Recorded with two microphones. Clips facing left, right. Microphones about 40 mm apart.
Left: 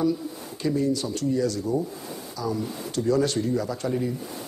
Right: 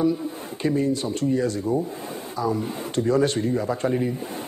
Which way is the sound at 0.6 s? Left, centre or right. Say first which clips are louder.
Right 2 dB; right.